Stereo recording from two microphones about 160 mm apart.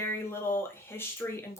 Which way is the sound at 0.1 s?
15° left (ahead or behind).